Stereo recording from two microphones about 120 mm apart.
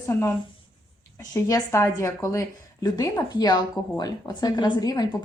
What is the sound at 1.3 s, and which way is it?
A woman's voice, 25° left (ahead or behind).